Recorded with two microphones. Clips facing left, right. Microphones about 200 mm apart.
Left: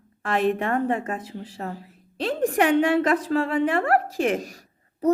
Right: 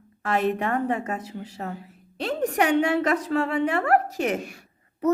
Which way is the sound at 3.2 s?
35° left (ahead or behind).